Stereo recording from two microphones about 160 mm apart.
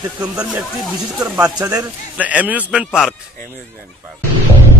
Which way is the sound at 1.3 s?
20° right (ahead or behind).